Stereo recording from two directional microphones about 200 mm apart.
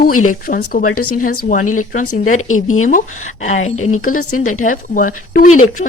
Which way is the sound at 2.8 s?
40° left (ahead or behind).